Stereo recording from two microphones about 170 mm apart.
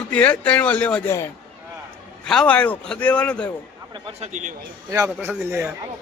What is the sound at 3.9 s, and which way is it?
Speech, 35° right (ahead or behind).